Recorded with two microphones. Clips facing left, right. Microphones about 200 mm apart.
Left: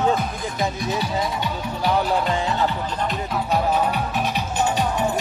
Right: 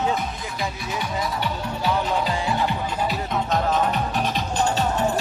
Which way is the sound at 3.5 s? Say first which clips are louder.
Left 2 dB; 10° left (ahead or behind).